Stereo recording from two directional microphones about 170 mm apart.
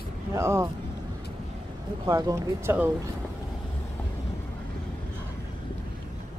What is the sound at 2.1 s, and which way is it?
Speech, 20° right (ahead or behind).